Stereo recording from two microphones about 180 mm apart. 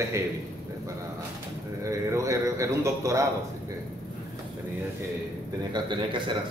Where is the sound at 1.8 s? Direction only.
15° right (ahead or behind).